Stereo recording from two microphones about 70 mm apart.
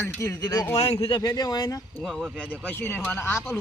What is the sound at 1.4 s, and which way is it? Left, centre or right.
Speech, left.